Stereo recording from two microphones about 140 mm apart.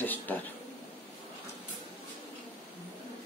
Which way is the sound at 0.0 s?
15° left (ahead or behind).